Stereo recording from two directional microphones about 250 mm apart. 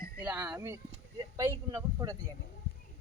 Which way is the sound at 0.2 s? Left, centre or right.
Centre.